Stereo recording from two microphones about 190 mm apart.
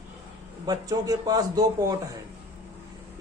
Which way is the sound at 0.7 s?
20° right (ahead or behind).